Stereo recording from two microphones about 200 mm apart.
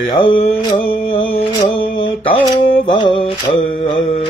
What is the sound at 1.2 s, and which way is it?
Mantra, 25° left (ahead or behind).